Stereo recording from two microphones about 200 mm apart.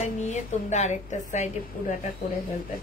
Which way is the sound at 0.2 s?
35° left (ahead or behind).